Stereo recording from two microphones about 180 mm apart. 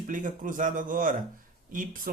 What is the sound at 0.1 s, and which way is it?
Speech, 50° right (ahead or behind).